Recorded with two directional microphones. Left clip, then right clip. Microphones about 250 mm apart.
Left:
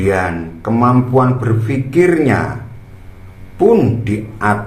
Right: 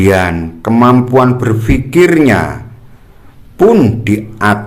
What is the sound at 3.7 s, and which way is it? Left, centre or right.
Speech, right.